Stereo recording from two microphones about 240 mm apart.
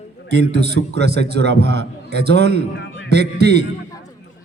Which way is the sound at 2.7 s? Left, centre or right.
Left.